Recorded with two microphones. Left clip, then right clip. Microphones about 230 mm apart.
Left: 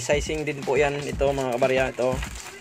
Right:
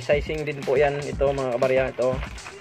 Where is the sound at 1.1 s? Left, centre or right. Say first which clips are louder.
Right 1 dB; centre.